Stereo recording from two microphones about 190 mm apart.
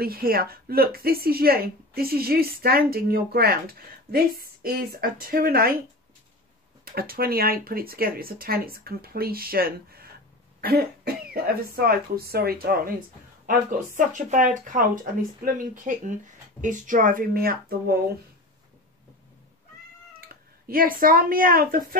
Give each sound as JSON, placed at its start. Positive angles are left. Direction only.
{"t": 0.0, "sound": "a woman's voice", "side_deg": -50}
{"t": 6.8, "sound": "a woman's voice", "side_deg": -55}
{"t": 20.2, "sound": "speech", "side_deg": -50}